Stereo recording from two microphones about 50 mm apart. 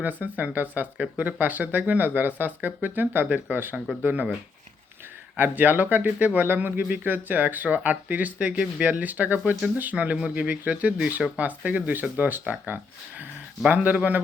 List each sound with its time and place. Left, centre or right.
0.0 s speech: right
5.4 s speech: right